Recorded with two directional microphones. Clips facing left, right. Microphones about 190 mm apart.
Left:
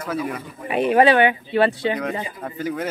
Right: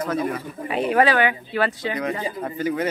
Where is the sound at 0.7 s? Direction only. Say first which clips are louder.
Left 3 dB; 20° left (ahead or behind).